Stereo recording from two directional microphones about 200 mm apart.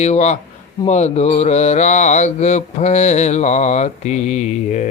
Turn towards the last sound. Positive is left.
turn(degrees=35)  # may be behind; listen again after turning